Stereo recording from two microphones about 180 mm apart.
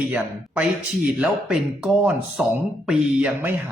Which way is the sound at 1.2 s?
5° right (ahead or behind).